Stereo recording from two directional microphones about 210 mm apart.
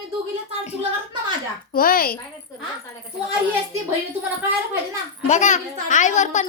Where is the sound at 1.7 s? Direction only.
45° left (ahead or behind).